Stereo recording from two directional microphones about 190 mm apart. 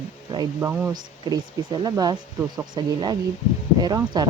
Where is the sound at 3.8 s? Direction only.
20° right (ahead or behind).